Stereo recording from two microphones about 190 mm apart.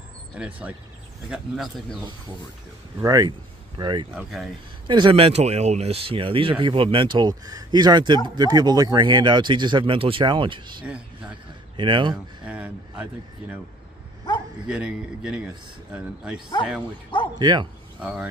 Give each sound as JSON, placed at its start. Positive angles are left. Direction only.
{"t": 0.4, "sound": "a man's voice", "side_deg": -5}
{"t": 3.0, "sound": "speech", "side_deg": -20}
{"t": 4.1, "sound": "a man's voice", "side_deg": -5}
{"t": 4.8, "sound": "speech", "side_deg": -25}
{"t": 12.4, "sound": "speech", "side_deg": -5}
{"t": 14.7, "sound": "a man's voice", "side_deg": -5}
{"t": 17.4, "sound": "speech", "side_deg": -20}
{"t": 18.0, "sound": "speech", "side_deg": -5}